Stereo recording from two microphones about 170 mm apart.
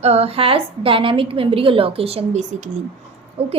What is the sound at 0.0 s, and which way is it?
A woman's voice, 35° right (ahead or behind).